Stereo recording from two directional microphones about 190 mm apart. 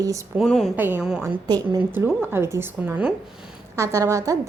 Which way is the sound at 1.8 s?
10° right (ahead or behind).